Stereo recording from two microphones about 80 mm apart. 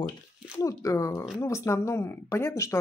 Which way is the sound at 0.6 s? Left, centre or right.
Left.